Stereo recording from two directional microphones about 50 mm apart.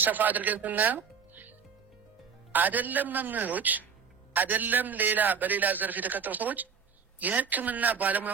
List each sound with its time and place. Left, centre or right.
0.0 s speech: right
2.5 s a man's voice: right